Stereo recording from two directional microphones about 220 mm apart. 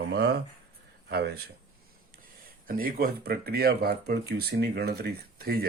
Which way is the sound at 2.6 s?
40° right (ahead or behind).